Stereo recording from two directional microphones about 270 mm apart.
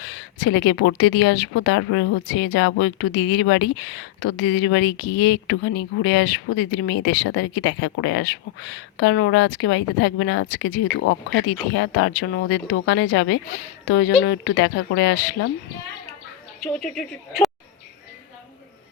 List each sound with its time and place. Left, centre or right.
0.1 s speech: left
16.8 s speech: centre